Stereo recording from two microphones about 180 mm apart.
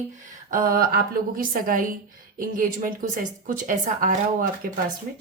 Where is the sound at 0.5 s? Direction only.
55° right (ahead or behind).